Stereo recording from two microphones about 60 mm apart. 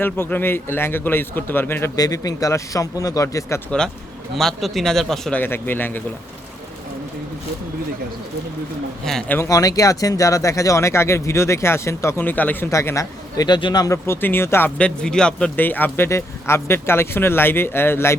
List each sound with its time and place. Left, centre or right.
0.3 s speech: left
2.0 s a man's voice: left
4.4 s speech: centre
5.5 s speech: left
9.5 s speech: left
12.2 s speech: left
12.7 s speech: left
13.3 s a man's voice: left
14.1 s speech: left
14.8 s speech: centre
15.5 s speech: left
16.0 s speech: left